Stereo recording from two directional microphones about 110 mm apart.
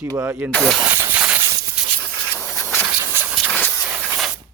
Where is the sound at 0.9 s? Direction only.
20° right (ahead or behind).